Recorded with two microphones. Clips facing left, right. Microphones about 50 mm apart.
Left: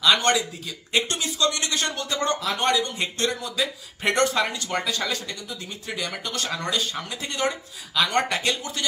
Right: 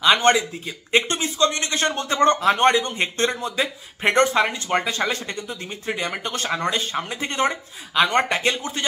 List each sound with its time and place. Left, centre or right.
0.0 s speech: right